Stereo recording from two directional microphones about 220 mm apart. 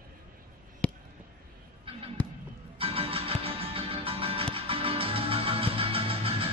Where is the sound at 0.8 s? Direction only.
5° left (ahead or behind).